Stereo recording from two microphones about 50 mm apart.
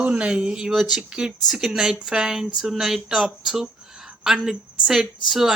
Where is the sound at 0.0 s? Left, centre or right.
Right.